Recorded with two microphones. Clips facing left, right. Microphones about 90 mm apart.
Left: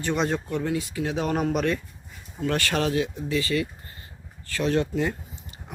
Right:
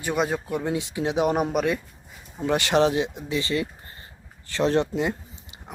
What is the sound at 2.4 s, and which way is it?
Speech, 20° right (ahead or behind).